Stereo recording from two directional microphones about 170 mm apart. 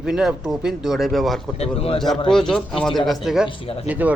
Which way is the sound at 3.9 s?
10° right (ahead or behind).